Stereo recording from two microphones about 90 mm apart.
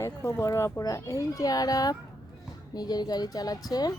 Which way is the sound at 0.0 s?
30° left (ahead or behind).